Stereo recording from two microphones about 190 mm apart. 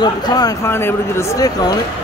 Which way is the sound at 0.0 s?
20° left (ahead or behind).